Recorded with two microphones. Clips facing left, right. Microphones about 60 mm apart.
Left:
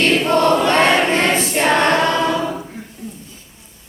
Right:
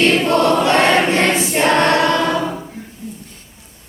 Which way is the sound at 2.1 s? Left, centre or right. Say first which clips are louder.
Right 1 dB; right.